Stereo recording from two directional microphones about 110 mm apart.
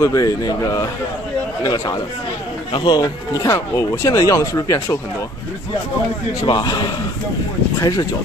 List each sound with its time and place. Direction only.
0.0 s speech: 35° left (ahead or behind)
2.7 s a man's voice: 45° left (ahead or behind)
3.3 s speech: 30° left (ahead or behind)
6.4 s a man's voice: 45° left (ahead or behind)